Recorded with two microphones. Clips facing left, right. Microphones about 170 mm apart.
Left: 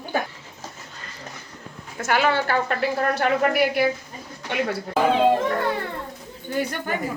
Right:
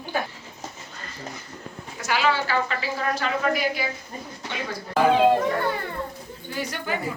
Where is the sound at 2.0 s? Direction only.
55° left (ahead or behind).